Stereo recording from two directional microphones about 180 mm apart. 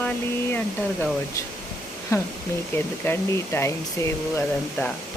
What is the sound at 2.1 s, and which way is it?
Speech, 15° left (ahead or behind).